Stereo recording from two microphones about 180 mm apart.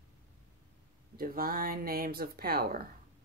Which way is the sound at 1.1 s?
55° right (ahead or behind).